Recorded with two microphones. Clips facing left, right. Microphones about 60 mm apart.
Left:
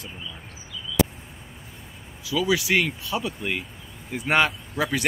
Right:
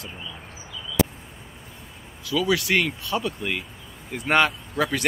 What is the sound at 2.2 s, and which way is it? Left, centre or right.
Speech, centre.